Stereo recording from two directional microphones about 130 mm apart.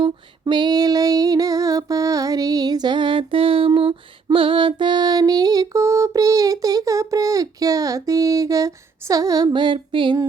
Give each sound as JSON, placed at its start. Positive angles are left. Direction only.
{"t": 0.0, "sound": "female singing", "side_deg": -35}